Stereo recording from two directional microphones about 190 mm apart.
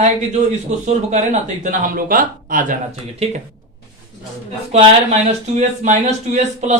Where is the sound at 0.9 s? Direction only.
40° right (ahead or behind).